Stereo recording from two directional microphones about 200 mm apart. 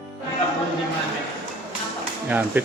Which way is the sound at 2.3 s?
10° right (ahead or behind).